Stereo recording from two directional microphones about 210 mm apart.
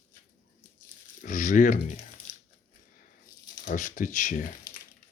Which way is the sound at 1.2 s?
35° left (ahead or behind).